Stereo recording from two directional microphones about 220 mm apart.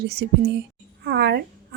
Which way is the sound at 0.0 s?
50° right (ahead or behind).